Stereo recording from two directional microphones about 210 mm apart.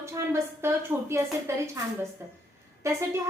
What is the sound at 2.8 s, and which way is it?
Speech, 15° right (ahead or behind).